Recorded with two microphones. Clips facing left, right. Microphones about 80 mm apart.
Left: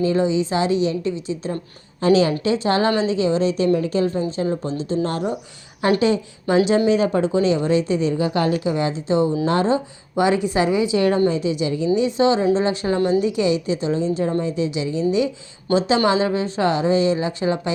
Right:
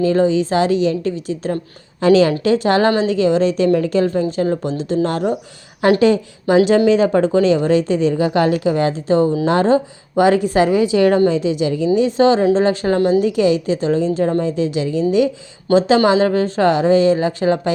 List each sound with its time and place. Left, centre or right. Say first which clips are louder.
0.0 s speech: right 4 dB; right
2.0 s a woman's voice: right 4 dB; right
2.9 s a woman's voice: right 4 dB; right
6.0 s speech: right 5 dB; right
6.7 s speech: right 4 dB; right
8.6 s speech: right 5 dB; right
9.5 s speech: right 5 dB; right
10.9 s a woman's voice: right 5 dB; right
11.9 s speech: right 5 dB; right
13.0 s a woman's voice: right 3 dB; right
13.2 s speech: right 4 dB; right